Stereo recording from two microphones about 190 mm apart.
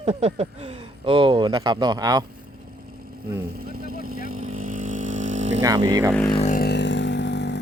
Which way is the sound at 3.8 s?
50° right (ahead or behind).